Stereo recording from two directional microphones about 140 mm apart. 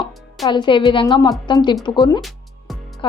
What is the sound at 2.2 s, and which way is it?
Music, centre (ahead or behind).